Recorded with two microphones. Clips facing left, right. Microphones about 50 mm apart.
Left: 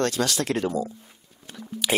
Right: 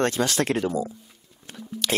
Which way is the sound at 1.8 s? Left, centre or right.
Centre.